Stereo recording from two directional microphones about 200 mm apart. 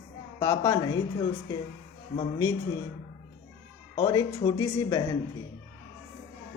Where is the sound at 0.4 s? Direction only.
15° left (ahead or behind).